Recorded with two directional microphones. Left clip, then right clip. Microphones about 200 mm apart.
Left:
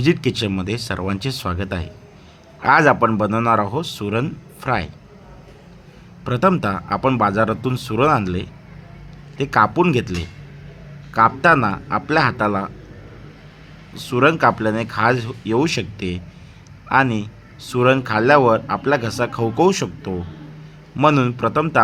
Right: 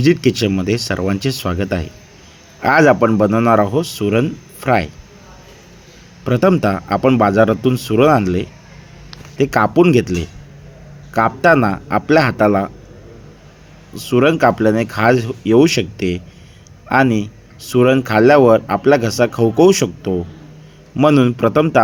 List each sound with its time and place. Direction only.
0.0 s speech: 5° right (ahead or behind)
6.2 s speech: 10° right (ahead or behind)
13.9 s speech: 5° right (ahead or behind)